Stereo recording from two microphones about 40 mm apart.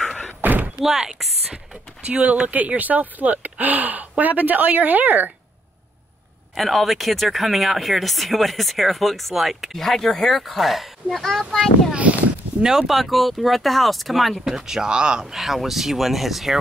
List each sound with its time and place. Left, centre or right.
0.4 s slam: right
0.8 s speech: centre
2.0 s speech: right
6.5 s speech: centre
11.9 s a sound: right
12.6 s speech: centre
12.9 s speech: centre; by 15.2 s right
15.3 s speech: centre